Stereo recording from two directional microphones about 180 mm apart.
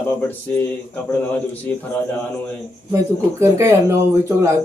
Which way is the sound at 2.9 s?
15° right (ahead or behind).